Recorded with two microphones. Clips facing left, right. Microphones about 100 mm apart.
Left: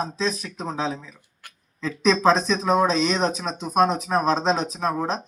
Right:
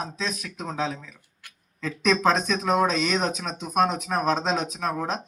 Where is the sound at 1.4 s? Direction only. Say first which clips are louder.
Left 4 dB; 45° left (ahead or behind).